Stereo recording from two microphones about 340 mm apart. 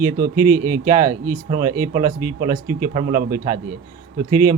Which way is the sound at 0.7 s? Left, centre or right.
Right.